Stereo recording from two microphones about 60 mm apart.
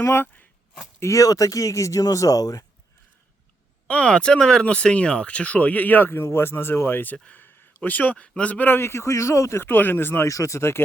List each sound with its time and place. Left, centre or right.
0.0 s speech: left
0.9 s speech: left
3.8 s speech: centre
8.8 s a man's voice: left
9.6 s speech: left
10.2 s speech: left